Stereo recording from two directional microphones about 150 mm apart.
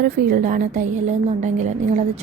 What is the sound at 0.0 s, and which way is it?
A woman's voice, 75° right (ahead or behind).